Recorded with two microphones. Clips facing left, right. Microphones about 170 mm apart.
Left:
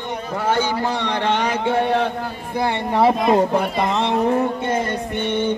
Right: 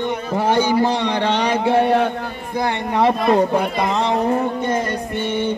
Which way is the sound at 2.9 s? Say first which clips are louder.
Even; 10° left (ahead or behind).